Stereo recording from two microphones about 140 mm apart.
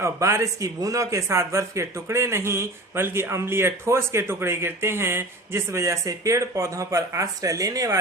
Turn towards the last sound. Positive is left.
turn(degrees=-25)  # may be behind; listen again after turning